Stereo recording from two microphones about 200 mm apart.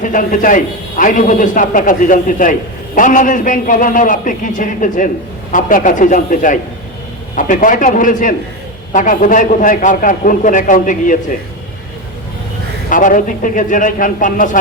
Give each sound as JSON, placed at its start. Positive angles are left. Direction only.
{"t": 0.0, "sound": "a man's voice", "side_deg": 40}
{"t": 12.9, "sound": "a man's voice", "side_deg": 40}